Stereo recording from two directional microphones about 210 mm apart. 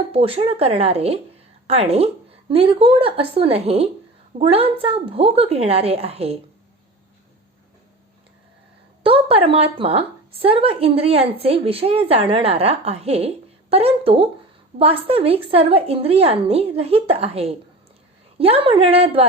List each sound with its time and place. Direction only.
0.1 s a woman's voice: 25° right (ahead or behind)
9.0 s a woman's voice: 25° right (ahead or behind)